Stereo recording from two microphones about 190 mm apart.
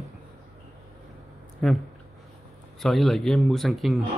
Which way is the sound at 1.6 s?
Centre (ahead or behind).